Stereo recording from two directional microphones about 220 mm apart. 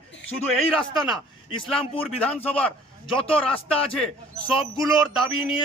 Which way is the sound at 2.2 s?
5° left (ahead or behind).